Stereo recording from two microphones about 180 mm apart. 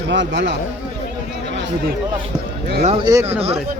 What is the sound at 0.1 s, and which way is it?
Speech, 80° right.